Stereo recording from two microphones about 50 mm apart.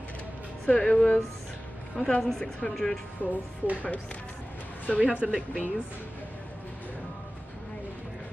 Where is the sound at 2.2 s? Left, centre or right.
Centre.